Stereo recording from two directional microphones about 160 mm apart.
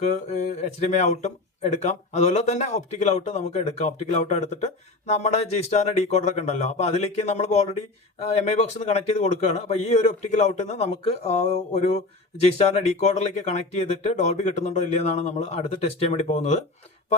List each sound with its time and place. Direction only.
0.3 s speech: 45° left (ahead or behind)